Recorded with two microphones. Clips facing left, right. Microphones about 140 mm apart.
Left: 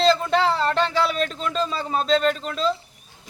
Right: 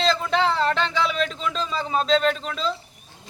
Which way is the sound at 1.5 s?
5° left (ahead or behind).